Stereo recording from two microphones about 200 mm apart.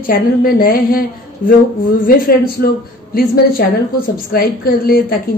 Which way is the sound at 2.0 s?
45° left (ahead or behind).